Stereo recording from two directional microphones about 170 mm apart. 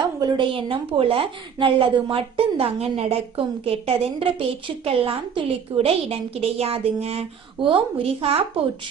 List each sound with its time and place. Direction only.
0.2 s a woman's voice: 25° right (ahead or behind)